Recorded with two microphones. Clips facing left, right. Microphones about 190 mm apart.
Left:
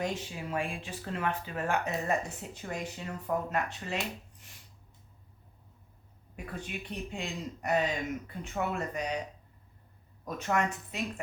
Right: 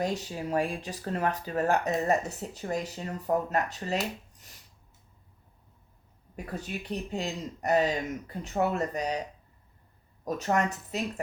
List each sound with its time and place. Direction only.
0.0 s speech: 40° right (ahead or behind)
4.4 s a sound: 40° right (ahead or behind)
6.3 s speech: 40° right (ahead or behind)
10.2 s speech: 40° right (ahead or behind)